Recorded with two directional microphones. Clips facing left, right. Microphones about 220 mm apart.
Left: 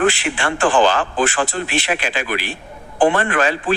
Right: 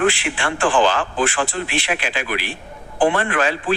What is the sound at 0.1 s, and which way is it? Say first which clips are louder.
A man's voice: left 2 dB; 40° left (ahead or behind).